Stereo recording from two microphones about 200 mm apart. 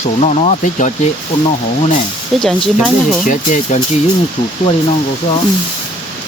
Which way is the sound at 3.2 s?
40° left (ahead or behind).